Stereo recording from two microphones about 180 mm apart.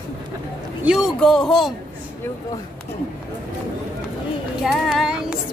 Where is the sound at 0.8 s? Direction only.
Centre (ahead or behind).